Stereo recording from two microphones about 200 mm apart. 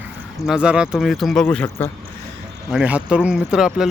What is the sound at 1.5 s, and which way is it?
Speech, 10° left (ahead or behind).